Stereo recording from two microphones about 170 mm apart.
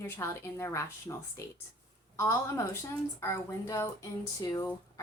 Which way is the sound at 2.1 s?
15° left (ahead or behind).